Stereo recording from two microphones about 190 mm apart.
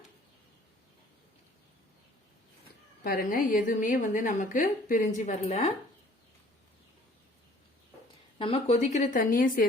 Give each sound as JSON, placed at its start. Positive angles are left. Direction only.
{"t": 3.0, "sound": "a woman's voice", "side_deg": 50}
{"t": 8.4, "sound": "a woman's voice", "side_deg": 30}